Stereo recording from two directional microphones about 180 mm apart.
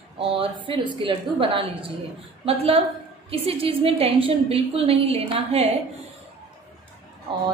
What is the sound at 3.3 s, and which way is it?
A woman's voice, 30° right (ahead or behind).